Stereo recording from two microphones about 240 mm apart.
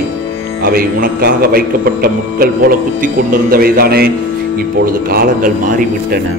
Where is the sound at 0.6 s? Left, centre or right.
Right.